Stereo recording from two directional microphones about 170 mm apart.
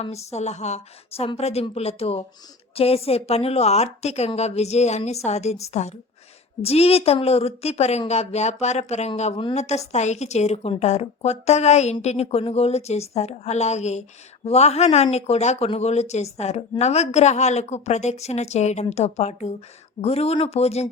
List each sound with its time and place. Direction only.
0.0 s a woman's voice: 40° left (ahead or behind)